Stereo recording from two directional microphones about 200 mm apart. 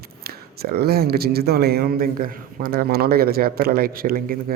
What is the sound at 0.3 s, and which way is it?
Speech, 50° right (ahead or behind).